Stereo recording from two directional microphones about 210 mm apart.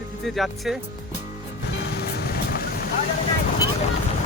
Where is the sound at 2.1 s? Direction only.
45° left (ahead or behind).